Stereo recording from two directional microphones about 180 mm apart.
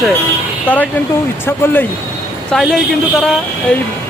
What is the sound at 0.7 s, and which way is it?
Speech, 5° left (ahead or behind).